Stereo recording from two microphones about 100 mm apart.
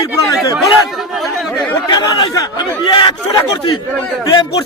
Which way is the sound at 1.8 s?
40° left (ahead or behind).